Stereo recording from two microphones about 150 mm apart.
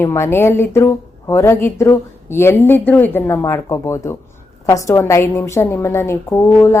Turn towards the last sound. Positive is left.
turn(degrees=15)  # may be behind; listen again after turning